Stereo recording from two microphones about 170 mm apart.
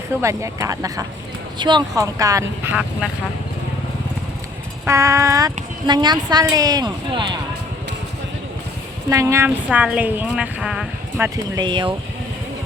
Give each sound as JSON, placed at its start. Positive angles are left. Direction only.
{"t": 0.2, "sound": "speech", "side_deg": -20}
{"t": 4.9, "sound": "speech", "side_deg": -15}
{"t": 9.0, "sound": "speech", "side_deg": -15}
{"t": 11.5, "sound": "speech", "side_deg": -25}